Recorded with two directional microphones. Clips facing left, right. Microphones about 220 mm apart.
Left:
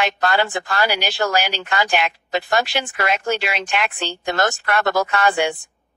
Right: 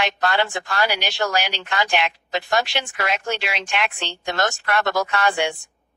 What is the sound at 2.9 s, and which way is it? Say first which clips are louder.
Speech: left 4 dB; 5° left (ahead or behind).